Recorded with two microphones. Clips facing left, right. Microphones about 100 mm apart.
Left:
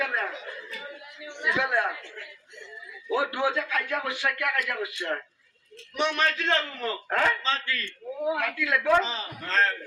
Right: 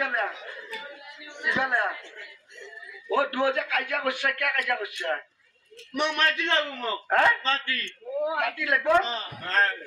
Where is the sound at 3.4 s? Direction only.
55° right (ahead or behind).